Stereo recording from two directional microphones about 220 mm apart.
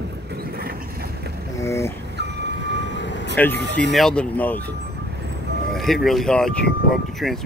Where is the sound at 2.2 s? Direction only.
50° right (ahead or behind).